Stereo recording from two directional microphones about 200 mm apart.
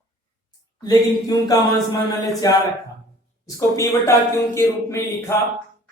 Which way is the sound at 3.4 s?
15° left (ahead or behind).